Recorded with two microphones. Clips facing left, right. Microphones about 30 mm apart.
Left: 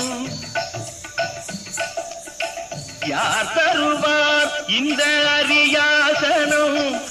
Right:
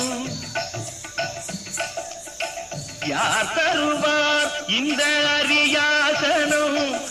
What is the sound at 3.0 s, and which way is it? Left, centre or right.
Music, centre.